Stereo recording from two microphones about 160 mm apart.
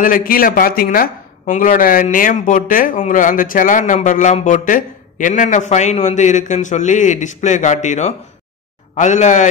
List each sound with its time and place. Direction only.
0.0 s speech: 60° left (ahead or behind)